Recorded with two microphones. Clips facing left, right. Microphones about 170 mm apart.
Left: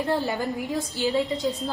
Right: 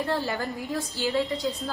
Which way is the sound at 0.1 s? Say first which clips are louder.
Left 3 dB; 20° left (ahead or behind).